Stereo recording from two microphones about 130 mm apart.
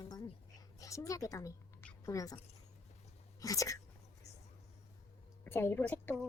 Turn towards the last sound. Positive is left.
turn(degrees=15)  # may be behind; listen again after turning